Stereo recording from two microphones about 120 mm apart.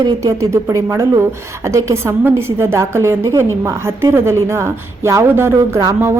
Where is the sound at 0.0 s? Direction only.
25° right (ahead or behind).